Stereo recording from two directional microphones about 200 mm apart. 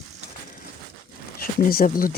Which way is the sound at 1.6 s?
45° left (ahead or behind).